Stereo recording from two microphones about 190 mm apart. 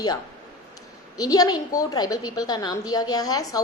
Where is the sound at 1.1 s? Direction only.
20° left (ahead or behind).